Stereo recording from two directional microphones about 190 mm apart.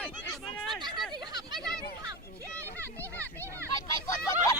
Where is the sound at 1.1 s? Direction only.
20° right (ahead or behind).